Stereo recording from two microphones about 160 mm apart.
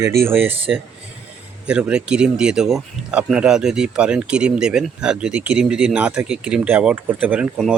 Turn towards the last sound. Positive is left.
turn(degrees=-10)  # may be behind; listen again after turning